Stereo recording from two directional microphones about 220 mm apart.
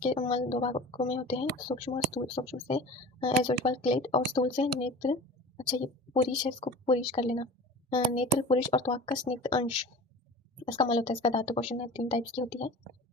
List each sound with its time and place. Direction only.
0.0 s speech: 25° left (ahead or behind)